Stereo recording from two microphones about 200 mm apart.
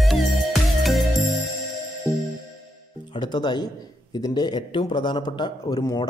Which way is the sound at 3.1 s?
20° left (ahead or behind).